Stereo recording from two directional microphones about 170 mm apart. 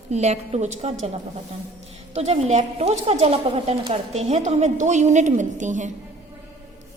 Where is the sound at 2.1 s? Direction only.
40° right (ahead or behind).